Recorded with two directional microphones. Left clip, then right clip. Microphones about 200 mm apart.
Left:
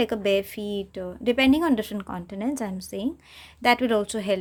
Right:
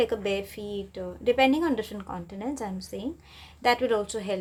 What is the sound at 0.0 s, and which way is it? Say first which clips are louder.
Speech: left 4 dB; 35° left (ahead or behind).